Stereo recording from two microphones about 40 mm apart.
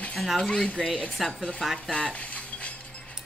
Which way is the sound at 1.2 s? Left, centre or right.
Centre.